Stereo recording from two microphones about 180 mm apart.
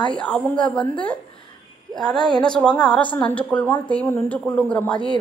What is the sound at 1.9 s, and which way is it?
Speech, 20° right (ahead or behind).